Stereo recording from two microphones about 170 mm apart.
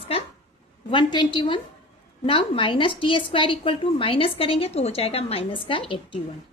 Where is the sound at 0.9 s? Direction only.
30° left (ahead or behind).